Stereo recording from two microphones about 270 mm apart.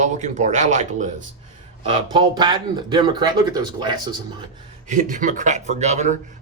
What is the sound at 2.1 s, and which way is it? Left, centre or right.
Speech, centre.